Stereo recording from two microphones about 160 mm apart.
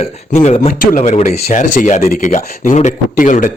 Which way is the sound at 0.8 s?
55° left (ahead or behind).